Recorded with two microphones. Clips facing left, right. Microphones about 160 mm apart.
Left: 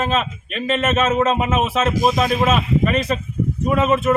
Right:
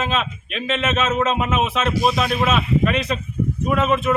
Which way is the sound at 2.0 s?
45° left (ahead or behind).